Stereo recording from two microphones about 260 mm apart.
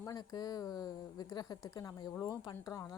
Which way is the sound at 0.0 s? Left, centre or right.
Centre.